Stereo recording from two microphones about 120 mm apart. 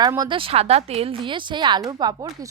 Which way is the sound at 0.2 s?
45° right (ahead or behind).